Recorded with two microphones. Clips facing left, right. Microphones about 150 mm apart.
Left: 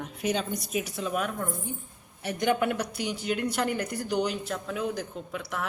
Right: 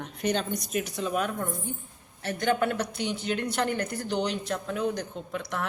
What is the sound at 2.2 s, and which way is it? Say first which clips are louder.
Speech: even; 15° left (ahead or behind).